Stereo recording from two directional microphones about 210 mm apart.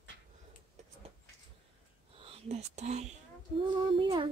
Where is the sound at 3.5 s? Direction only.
25° right (ahead or behind).